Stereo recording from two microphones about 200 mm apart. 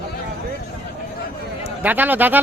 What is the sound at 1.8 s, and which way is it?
Speech, 10° right (ahead or behind).